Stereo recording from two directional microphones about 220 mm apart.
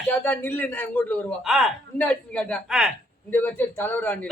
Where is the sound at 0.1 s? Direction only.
10° left (ahead or behind).